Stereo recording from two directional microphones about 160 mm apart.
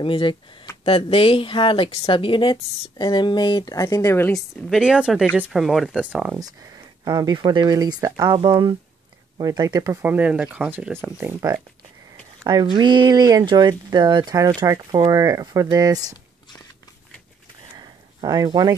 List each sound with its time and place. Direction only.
0.0 s a woman's voice: 30° left (ahead or behind)
4.3 s speech: 5° left (ahead or behind)
6.4 s speech: 25° right (ahead or behind)
10.1 s speech: 10° right (ahead or behind)
12.4 s speech: 25° right (ahead or behind)
17.7 s a sound: 25° right (ahead or behind)